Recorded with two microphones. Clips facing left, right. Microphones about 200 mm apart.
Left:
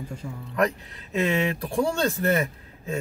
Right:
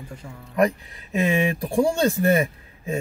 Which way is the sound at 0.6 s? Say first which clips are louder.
Right 4 dB; 10° right (ahead or behind).